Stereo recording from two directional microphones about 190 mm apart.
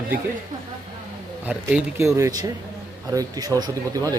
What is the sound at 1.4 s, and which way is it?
A man's voice, 10° right (ahead or behind).